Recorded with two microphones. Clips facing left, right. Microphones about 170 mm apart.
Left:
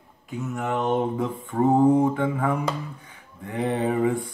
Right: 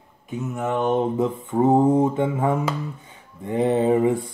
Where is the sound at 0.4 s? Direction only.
20° right (ahead or behind).